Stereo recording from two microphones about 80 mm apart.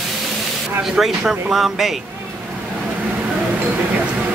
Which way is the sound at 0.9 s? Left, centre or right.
Centre.